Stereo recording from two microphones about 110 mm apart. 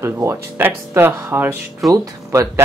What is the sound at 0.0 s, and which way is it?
Speech, 25° right (ahead or behind).